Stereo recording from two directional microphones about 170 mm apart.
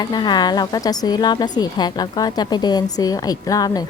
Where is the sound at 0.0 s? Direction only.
25° left (ahead or behind).